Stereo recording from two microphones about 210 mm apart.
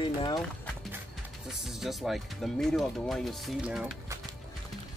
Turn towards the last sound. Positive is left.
turn(degrees=-5)  # may be behind; listen again after turning